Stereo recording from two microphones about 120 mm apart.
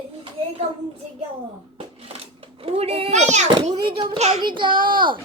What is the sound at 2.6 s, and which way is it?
Speech, 55° right (ahead or behind).